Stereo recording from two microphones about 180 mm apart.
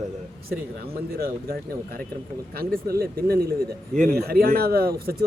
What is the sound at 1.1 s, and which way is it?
Speech, 55° right (ahead or behind).